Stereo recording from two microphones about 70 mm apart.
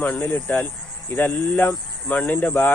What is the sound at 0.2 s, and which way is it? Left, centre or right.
Speech, left.